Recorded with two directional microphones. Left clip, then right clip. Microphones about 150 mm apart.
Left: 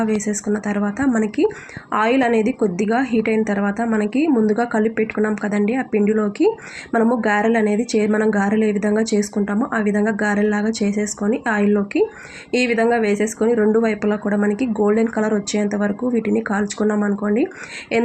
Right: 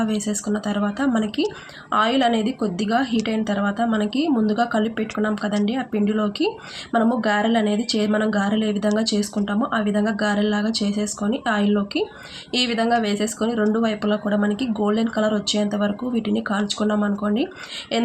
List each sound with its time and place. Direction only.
0.0 s speech: 20° left (ahead or behind)